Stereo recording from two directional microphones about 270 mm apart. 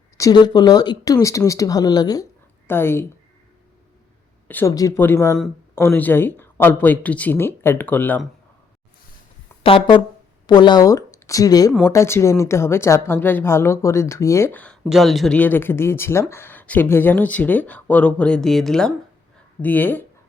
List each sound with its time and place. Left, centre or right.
0.2 s a woman's voice: centre
4.4 s a woman's voice: centre
9.6 s a woman's voice: centre